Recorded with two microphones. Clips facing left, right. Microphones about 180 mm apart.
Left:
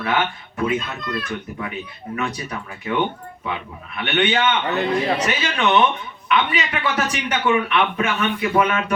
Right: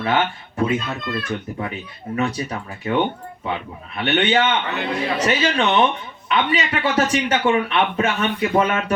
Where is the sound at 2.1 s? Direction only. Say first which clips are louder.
Right 4 dB; 30° right (ahead or behind).